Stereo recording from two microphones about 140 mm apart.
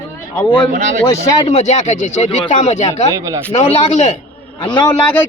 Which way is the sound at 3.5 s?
55° left (ahead or behind).